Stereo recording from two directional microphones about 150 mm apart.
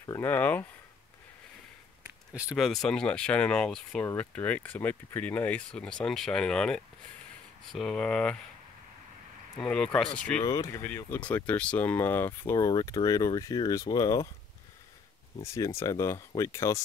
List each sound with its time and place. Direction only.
0.0 s a sound: 15° left (ahead or behind)
2.3 s speech: 5° right (ahead or behind)
9.6 s speech: 5° left (ahead or behind)
10.4 s speech: 20° left (ahead or behind)
15.4 s speech: 20° left (ahead or behind)